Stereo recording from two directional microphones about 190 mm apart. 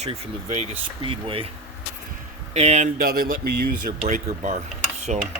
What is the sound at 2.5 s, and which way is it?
A man's voice, 35° right (ahead or behind).